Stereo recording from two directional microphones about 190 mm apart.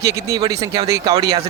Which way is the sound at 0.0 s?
15° right (ahead or behind).